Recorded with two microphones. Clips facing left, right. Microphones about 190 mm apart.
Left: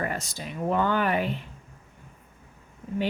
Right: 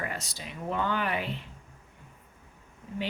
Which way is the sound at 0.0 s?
50° left (ahead or behind).